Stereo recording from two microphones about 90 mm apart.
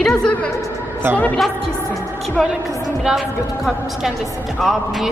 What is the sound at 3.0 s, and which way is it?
A woman's voice, 5° right (ahead or behind).